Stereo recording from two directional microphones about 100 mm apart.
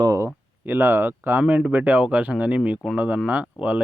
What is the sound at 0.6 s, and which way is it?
Speech, 20° right (ahead or behind).